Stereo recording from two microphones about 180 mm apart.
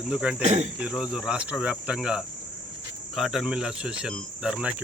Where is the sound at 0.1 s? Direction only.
5° right (ahead or behind).